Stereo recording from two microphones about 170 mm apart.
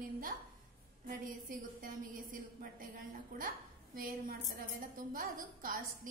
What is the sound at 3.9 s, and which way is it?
A woman's voice, 55° right (ahead or behind).